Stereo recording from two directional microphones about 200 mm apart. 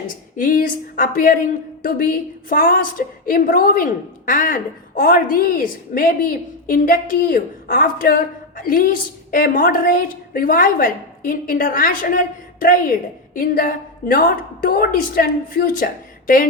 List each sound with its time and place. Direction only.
0.3 s a woman's voice: 40° left (ahead or behind)